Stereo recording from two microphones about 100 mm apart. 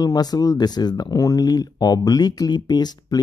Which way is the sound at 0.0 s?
40° left (ahead or behind).